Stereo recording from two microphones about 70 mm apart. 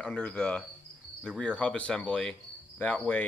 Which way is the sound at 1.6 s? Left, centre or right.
Centre.